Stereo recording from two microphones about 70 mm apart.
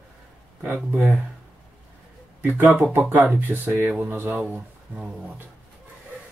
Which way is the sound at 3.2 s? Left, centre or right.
Right.